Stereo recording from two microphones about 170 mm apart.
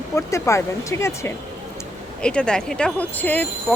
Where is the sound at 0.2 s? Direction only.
15° left (ahead or behind).